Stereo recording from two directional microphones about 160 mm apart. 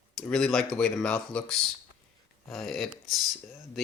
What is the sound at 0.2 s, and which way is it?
Speech, 5° left (ahead or behind).